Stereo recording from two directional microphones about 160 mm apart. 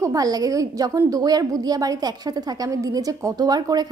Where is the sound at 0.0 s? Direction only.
20° right (ahead or behind).